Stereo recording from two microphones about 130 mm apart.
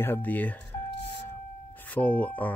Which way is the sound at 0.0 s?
15° left (ahead or behind).